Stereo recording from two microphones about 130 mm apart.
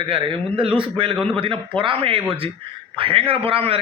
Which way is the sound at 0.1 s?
45° right (ahead or behind).